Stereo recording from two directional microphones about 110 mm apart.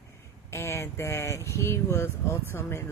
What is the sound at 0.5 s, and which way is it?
Speech, 25° left (ahead or behind).